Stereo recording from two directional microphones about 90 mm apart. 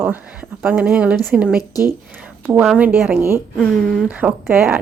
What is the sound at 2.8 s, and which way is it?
Speech, 20° right (ahead or behind).